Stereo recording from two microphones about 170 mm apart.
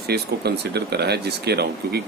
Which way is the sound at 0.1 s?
70° right (ahead or behind).